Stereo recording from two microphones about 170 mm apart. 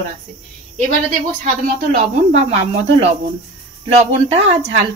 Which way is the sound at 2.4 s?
35° right (ahead or behind).